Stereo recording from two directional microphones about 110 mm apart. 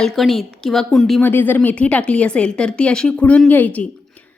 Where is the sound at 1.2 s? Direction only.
20° left (ahead or behind).